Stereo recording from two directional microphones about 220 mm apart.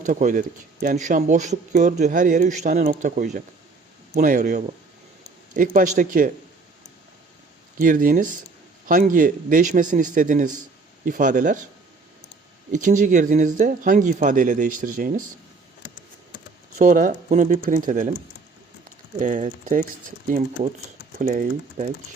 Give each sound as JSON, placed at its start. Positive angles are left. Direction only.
{"t": 0.1, "sound": "speech", "side_deg": -35}
{"t": 7.8, "sound": "speech", "side_deg": -40}
{"t": 12.7, "sound": "speech", "side_deg": -35}
{"t": 16.7, "sound": "speech", "side_deg": -35}
{"t": 19.2, "sound": "speech", "side_deg": -35}